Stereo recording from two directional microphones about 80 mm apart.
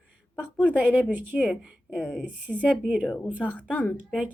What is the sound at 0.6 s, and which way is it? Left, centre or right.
Speech, centre.